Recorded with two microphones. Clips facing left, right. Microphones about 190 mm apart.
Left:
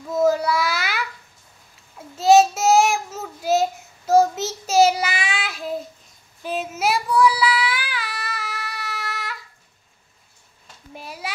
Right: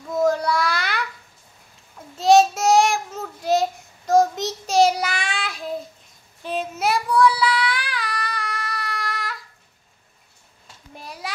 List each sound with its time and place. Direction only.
0.1 s babbling: 5° left (ahead or behind)
2.1 s child singing: 5° left (ahead or behind)
11.0 s a sound: centre (ahead or behind)